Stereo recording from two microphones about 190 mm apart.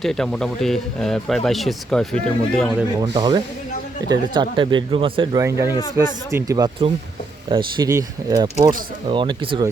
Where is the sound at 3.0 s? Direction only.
20° right (ahead or behind).